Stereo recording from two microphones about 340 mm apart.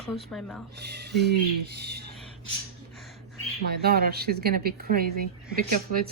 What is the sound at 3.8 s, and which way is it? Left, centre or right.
A woman's voice, right.